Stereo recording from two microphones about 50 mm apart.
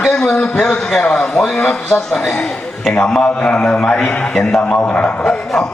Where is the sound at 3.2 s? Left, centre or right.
Left.